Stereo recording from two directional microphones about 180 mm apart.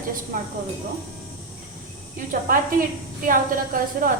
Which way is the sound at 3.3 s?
50° right (ahead or behind).